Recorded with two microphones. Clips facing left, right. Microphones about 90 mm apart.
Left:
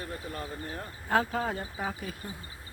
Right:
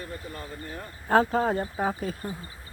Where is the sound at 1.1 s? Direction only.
35° right (ahead or behind).